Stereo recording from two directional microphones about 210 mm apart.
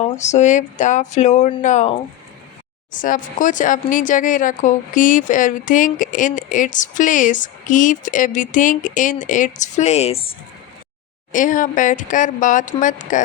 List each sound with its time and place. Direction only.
0.0 s speech: 35° left (ahead or behind)
11.3 s speech: 40° left (ahead or behind)